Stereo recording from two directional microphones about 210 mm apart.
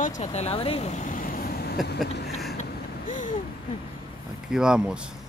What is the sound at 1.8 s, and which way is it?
Speech, 50° left (ahead or behind).